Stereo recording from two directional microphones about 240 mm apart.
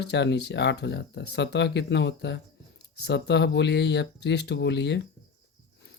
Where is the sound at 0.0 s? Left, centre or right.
Left.